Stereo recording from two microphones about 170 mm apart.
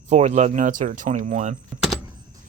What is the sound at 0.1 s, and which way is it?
Speech, 40° right (ahead or behind).